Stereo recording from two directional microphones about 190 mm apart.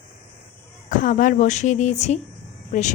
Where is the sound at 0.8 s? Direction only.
45° left (ahead or behind).